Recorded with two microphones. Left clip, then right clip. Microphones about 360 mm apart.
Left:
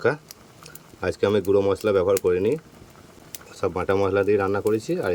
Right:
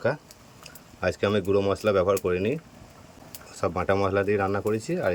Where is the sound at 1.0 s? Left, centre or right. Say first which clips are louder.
Left 3 dB; centre.